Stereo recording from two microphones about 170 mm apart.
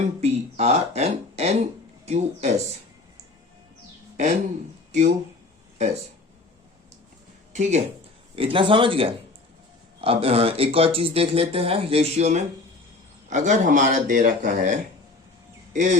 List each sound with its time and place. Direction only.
0.2 s speech: 40° right (ahead or behind)
4.9 s speech: 45° right (ahead or behind)
5.7 s a sound: 40° right (ahead or behind)
7.5 s speech: 45° right (ahead or behind)
8.4 s speech: 30° right (ahead or behind); by 16.0 s 45° right (ahead or behind)